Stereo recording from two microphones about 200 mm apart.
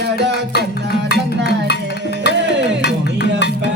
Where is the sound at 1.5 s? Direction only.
55° left (ahead or behind).